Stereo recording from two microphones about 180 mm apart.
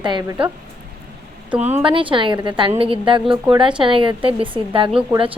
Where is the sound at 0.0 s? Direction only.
25° right (ahead or behind).